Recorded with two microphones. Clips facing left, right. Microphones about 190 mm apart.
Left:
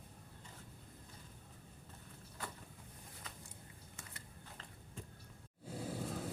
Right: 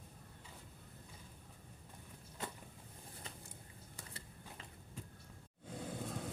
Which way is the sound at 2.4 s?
20° right (ahead or behind).